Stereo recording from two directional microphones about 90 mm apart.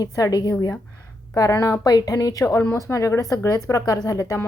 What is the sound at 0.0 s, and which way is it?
A woman's voice, 40° left (ahead or behind).